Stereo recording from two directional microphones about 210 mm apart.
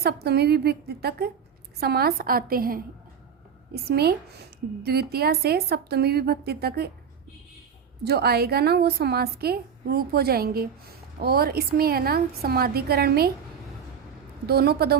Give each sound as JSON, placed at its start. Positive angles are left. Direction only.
{"t": 0.0, "sound": "a woman's voice", "side_deg": -50}
{"t": 8.0, "sound": "a woman's voice", "side_deg": -50}
{"t": 14.4, "sound": "a woman's voice", "side_deg": -50}